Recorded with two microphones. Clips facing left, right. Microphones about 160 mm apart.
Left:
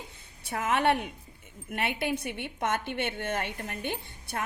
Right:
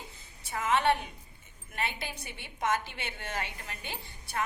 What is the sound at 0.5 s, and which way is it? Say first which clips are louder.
A woman's voice: left 1 dB; 60° left (ahead or behind).